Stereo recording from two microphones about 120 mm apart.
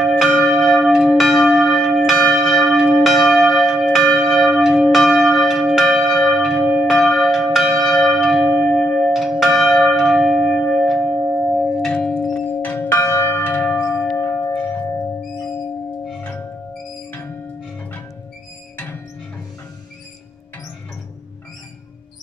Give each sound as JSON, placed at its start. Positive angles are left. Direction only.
{"t": 0.0, "sound": "church bell", "side_deg": 0}
{"t": 11.8, "sound": "a sound", "side_deg": 5}
{"t": 12.2, "sound": "tubular bells", "side_deg": 10}
{"t": 12.7, "sound": "church bell", "side_deg": 20}
{"t": 14.1, "sound": "tubular bells", "side_deg": 20}
{"t": 16.2, "sound": "music", "side_deg": 15}